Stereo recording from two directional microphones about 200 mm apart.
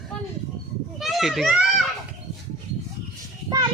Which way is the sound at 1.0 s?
Centre (ahead or behind).